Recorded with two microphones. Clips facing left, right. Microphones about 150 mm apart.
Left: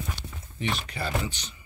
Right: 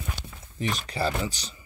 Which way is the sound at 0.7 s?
35° right (ahead or behind).